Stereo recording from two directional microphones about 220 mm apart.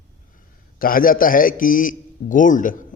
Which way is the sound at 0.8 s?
40° left (ahead or behind).